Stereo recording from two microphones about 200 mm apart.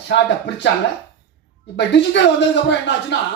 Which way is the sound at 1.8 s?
60° left (ahead or behind).